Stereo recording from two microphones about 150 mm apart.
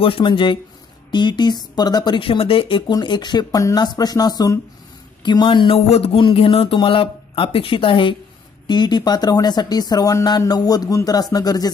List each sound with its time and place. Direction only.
0.0 s speech: 35° left (ahead or behind)